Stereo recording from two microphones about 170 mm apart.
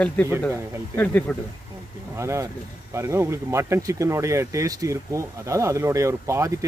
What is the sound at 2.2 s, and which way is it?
Speech, 15° right (ahead or behind).